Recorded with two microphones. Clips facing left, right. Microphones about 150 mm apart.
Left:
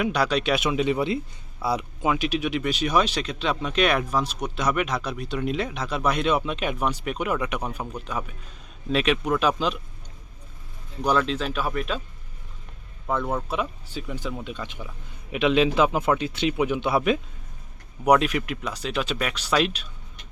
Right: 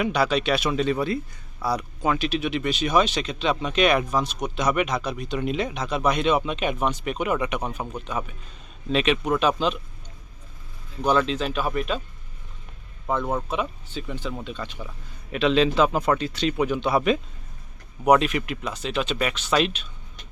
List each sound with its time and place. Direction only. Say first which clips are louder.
0.0 s speech: right 1 dB; 5° right (ahead or behind); by 2.0 s 20° left (ahead or behind)
2.0 s speech: even; 10° left (ahead or behind)
11.0 s speech: right 1 dB; centre (ahead or behind)
13.5 s a man's voice: right 1 dB; 5° left (ahead or behind)